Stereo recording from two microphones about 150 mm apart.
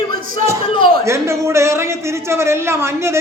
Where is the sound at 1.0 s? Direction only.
20° right (ahead or behind).